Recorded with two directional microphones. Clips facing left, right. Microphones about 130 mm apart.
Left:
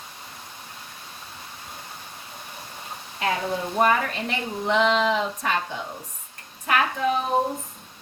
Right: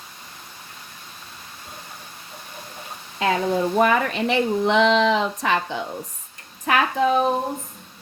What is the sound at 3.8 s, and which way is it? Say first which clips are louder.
Speech: even; 90° right.